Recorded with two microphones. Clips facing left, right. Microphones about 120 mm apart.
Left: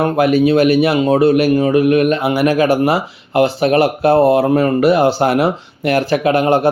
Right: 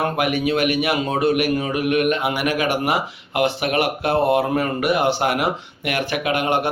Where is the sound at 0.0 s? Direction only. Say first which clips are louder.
Left 8 dB; 30° left (ahead or behind).